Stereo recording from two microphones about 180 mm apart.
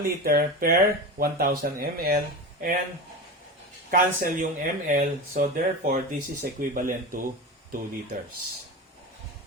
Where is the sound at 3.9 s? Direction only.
50° right (ahead or behind).